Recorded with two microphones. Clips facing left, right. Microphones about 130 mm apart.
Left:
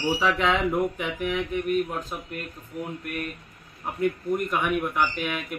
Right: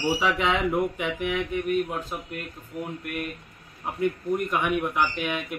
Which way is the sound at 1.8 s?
10° right (ahead or behind).